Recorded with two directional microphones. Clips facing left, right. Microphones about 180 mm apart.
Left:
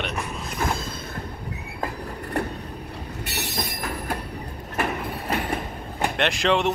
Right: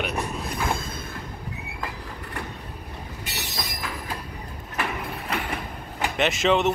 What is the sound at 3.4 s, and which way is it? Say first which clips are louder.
Train: left 4 dB; 65° left (ahead or behind).